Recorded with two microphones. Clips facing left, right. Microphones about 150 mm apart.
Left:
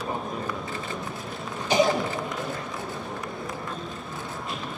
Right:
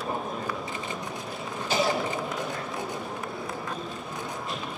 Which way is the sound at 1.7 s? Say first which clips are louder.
Left 6 dB; 15° left (ahead or behind).